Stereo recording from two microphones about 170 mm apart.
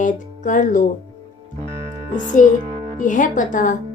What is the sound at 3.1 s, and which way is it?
Speech, 50° left (ahead or behind).